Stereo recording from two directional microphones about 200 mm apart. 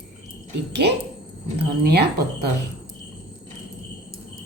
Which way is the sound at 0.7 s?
55° right (ahead or behind).